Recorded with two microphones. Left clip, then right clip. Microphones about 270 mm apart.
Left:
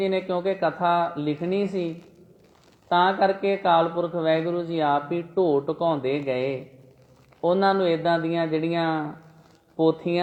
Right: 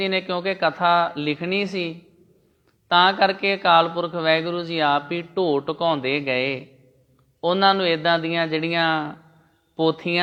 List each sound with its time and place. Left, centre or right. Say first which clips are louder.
0.0 s speech: right 1 dB; right
2.9 s speech: right 3 dB; right